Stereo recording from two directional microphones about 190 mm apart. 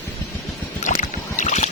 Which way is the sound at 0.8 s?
40° left (ahead or behind).